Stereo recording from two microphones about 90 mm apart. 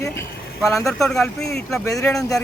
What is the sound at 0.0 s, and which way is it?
Speech, 30° left (ahead or behind).